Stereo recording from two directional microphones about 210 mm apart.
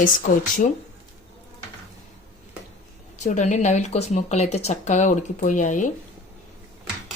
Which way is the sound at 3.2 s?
35° left (ahead or behind).